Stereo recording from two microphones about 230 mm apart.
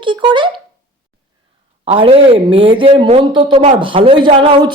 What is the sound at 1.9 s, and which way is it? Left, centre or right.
Speech, right.